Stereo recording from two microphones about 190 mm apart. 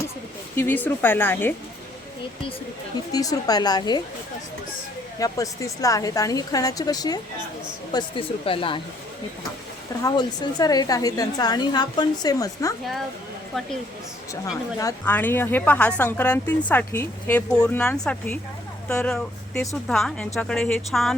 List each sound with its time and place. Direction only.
0.5 s a woman's voice: 10° left (ahead or behind)
3.1 s a woman's voice: 20° left (ahead or behind)
5.2 s a woman's voice: 15° left (ahead or behind)
10.0 s a woman's voice: 20° left (ahead or behind)
14.8 s a woman's voice: 15° left (ahead or behind)